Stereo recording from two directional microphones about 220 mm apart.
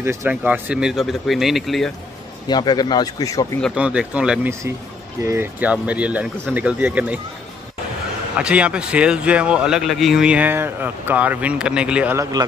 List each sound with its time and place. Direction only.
0.0 s a man's voice: 10° right (ahead or behind)
2.4 s speech: 20° left (ahead or behind)
3.6 s a man's voice: 5° right (ahead or behind)
8.4 s a man's voice: 5° right (ahead or behind)